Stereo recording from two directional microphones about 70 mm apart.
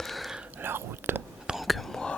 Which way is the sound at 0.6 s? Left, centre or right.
Right.